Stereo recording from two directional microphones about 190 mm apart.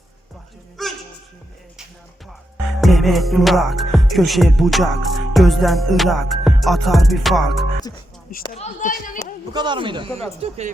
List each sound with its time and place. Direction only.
0.8 s music: centre (ahead or behind)
2.8 s music: centre (ahead or behind)
8.4 s a sound: 35° left (ahead or behind)
9.5 s speech: 25° right (ahead or behind)